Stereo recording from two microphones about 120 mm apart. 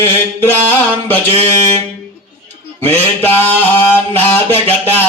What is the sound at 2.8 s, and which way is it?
A man's voice, 15° left (ahead or behind).